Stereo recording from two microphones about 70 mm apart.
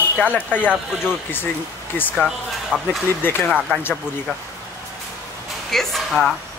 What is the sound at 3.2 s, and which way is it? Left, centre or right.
Speech, left.